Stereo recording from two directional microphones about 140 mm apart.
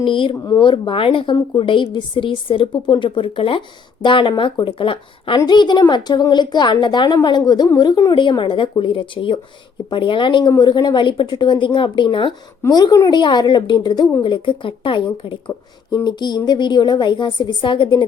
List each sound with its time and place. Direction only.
0.0 s a woman's voice: 35° left (ahead or behind)
0.3 s a woman's voice: 25° left (ahead or behind)